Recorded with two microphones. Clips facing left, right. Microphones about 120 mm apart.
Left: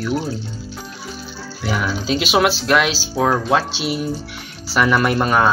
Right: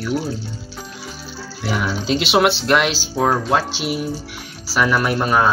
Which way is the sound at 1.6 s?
5° left (ahead or behind).